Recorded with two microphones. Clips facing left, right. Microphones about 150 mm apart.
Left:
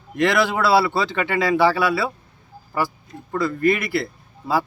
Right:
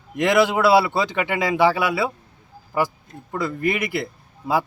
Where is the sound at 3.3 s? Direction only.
20° right (ahead or behind).